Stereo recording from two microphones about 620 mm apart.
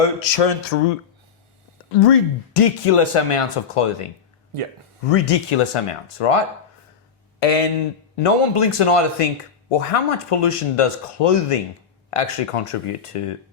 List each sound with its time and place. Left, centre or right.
0.0 s a sound: left
2.0 s speech: left
5.1 s speech: left
7.3 s speech: left
8.1 s speech: left